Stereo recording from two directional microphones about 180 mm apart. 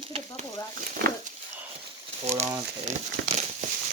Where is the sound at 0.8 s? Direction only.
55° right (ahead or behind).